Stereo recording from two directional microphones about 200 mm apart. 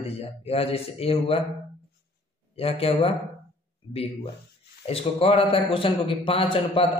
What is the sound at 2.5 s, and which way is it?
A man's voice, 30° left (ahead or behind).